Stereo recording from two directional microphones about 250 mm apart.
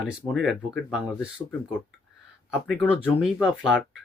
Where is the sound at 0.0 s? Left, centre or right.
Centre.